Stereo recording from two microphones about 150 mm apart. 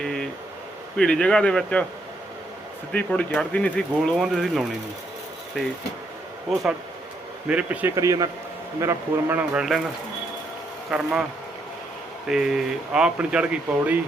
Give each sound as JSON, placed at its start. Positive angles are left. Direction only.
{"t": 0.0, "sound": "a sound", "side_deg": 5}
{"t": 0.9, "sound": "speech", "side_deg": 5}
{"t": 2.9, "sound": "speech", "side_deg": 10}
{"t": 6.5, "sound": "speech", "side_deg": 0}
{"t": 7.9, "sound": "a man's voice", "side_deg": -20}
{"t": 10.9, "sound": "speech", "side_deg": 0}
{"t": 12.3, "sound": "speech", "side_deg": -5}